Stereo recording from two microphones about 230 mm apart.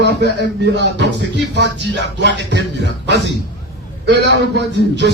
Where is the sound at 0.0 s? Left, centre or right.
Right.